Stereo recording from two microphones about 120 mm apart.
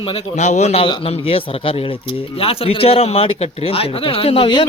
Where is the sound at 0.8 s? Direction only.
50° left (ahead or behind).